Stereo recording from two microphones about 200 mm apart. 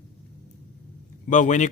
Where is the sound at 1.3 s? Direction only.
40° left (ahead or behind).